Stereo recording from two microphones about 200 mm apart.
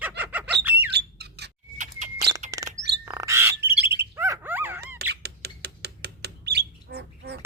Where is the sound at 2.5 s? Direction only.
15° right (ahead or behind).